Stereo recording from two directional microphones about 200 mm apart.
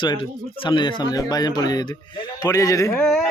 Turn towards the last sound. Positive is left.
turn(degrees=0)  # may be behind; listen again after turning